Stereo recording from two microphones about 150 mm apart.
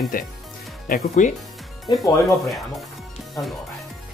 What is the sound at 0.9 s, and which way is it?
Speech, 55° left (ahead or behind).